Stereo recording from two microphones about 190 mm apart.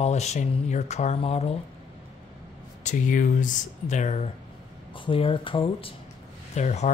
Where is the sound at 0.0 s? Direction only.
35° left (ahead or behind).